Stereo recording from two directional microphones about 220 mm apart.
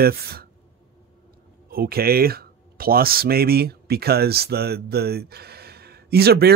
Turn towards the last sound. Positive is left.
turn(degrees=-45)  # may be behind; listen again after turning